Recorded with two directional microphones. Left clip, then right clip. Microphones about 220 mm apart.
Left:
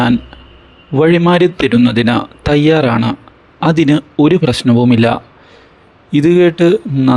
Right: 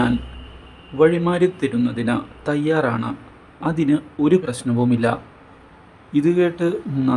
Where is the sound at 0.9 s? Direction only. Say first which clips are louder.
Left 7 dB; 40° left (ahead or behind).